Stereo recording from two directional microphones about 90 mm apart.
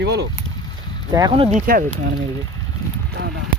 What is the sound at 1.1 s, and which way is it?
Speech, 50° right (ahead or behind).